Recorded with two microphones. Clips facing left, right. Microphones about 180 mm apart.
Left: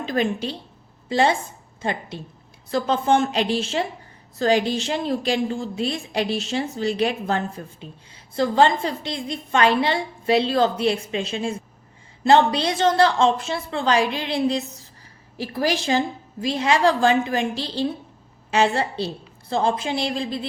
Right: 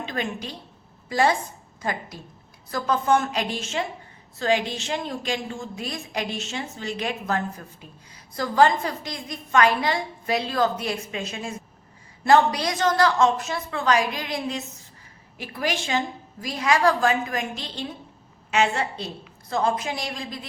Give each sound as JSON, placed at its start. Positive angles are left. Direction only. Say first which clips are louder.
{"t": 0.0, "sound": "a woman's voice", "louder": "left 7 dB", "side_deg": 35}